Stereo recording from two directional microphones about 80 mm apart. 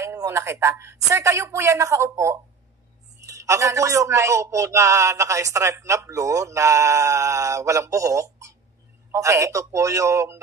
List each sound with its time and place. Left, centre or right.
0.0 s a man's voice: right